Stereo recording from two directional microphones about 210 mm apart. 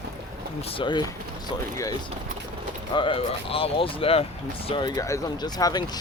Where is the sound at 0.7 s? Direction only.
25° left (ahead or behind).